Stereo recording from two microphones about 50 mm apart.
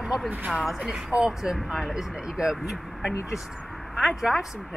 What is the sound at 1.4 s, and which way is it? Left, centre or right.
Speech, centre.